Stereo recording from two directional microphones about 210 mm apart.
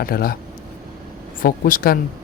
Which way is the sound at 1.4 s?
40° left (ahead or behind).